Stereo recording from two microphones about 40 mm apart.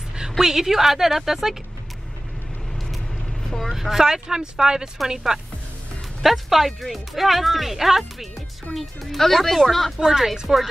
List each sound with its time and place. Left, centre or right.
0.4 s speech: centre
3.5 s speech: centre
6.2 s speech: centre
9.9 s speech: centre